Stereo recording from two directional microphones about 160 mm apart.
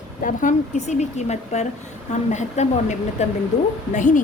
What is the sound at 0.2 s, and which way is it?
A woman's voice, 55° left (ahead or behind).